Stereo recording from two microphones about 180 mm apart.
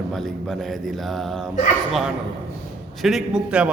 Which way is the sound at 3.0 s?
Centre (ahead or behind).